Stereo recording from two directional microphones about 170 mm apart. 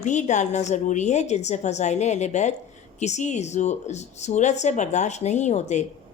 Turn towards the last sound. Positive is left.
turn(degrees=40)  # may be behind; listen again after turning